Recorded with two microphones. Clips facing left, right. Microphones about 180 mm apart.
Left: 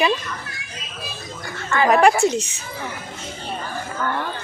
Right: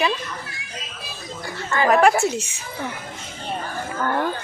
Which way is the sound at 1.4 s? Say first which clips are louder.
Left 2 dB; 35° right (ahead or behind).